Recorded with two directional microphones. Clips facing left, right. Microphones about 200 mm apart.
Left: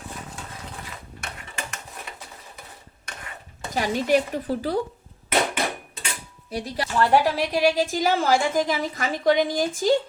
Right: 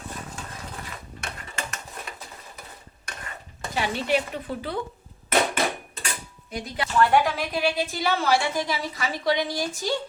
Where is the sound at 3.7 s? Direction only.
40° left (ahead or behind).